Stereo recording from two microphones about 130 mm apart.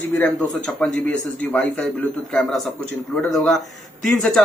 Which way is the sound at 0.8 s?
10° left (ahead or behind).